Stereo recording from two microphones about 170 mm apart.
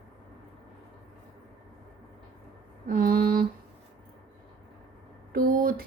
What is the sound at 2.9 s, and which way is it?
Mantra, 60° right (ahead or behind).